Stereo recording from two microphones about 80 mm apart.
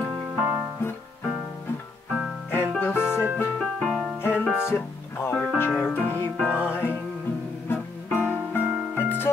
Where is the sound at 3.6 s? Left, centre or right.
Centre.